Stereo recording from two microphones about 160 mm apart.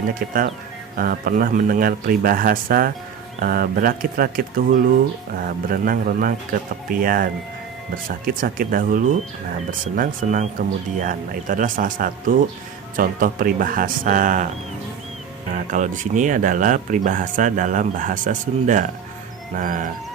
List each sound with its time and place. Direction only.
0.1 s speech: 60° right (ahead or behind)
15.5 s speech: 50° right (ahead or behind)